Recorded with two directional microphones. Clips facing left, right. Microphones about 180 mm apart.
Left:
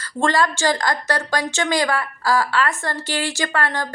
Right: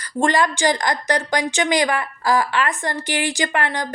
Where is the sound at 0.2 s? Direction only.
15° right (ahead or behind).